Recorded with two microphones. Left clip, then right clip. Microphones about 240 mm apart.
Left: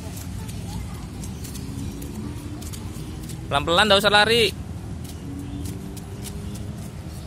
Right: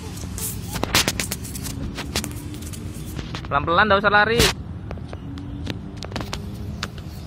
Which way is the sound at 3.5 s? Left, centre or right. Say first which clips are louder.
Even; left.